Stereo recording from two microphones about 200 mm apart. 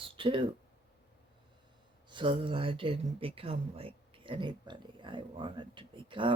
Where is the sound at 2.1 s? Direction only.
25° right (ahead or behind).